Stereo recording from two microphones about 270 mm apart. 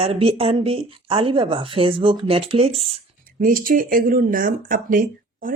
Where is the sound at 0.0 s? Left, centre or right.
Right.